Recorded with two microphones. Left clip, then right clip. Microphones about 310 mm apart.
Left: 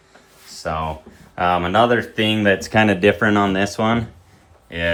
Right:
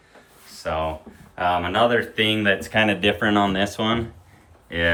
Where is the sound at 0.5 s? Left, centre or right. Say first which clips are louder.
Left 1 dB; centre.